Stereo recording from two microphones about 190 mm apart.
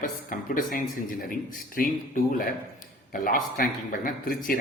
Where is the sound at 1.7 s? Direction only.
45° left (ahead or behind).